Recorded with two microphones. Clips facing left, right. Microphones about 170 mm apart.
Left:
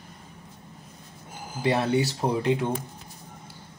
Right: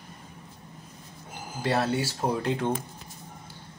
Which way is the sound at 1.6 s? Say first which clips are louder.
Left 3 dB; 15° left (ahead or behind).